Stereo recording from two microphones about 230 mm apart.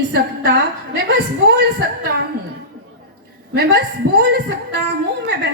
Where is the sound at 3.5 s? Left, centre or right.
Right.